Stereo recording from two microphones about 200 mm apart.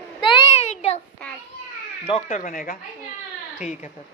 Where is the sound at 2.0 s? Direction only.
30° left (ahead or behind).